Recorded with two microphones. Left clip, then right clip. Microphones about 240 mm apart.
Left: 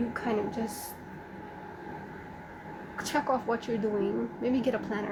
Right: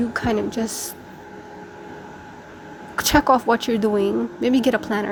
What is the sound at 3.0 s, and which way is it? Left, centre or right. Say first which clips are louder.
A woman's voice: right 13 dB; right.